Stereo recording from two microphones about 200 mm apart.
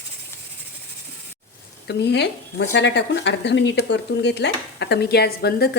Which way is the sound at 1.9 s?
55° left (ahead or behind).